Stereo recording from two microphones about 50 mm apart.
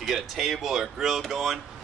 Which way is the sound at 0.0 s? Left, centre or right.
Centre.